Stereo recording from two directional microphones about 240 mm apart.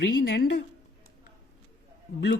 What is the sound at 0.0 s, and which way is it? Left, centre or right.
Speech, left.